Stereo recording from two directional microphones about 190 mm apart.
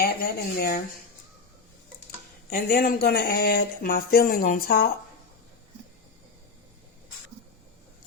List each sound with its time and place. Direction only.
0.0 s speech: 50° left (ahead or behind)
2.5 s speech: 50° left (ahead or behind)